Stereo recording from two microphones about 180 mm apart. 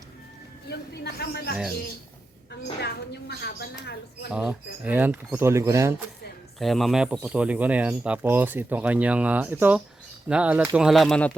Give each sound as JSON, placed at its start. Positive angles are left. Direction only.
{"t": 0.7, "sound": "speech", "side_deg": 65}
{"t": 2.8, "sound": "speech", "side_deg": 65}
{"t": 4.3, "sound": "speech", "side_deg": -5}
{"t": 6.6, "sound": "speech", "side_deg": 0}